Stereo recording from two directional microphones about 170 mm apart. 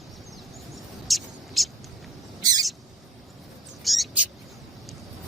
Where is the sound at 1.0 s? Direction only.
Centre (ahead or behind).